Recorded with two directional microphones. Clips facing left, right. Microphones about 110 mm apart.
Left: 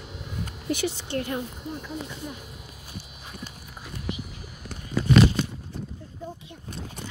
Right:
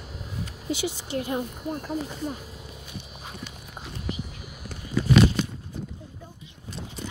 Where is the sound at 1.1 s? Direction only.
15° right (ahead or behind).